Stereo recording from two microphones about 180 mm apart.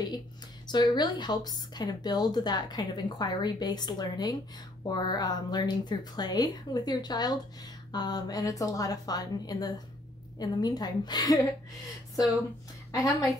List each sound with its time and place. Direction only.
0.7 s speech: 25° left (ahead or behind)
12.9 s speech: 20° left (ahead or behind)